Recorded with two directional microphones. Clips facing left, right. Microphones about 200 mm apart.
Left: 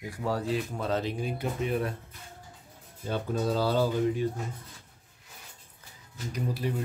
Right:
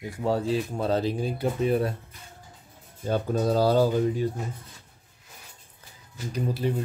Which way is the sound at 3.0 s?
40° right (ahead or behind).